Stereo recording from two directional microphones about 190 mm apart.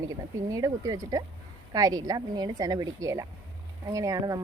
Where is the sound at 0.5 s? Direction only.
15° right (ahead or behind).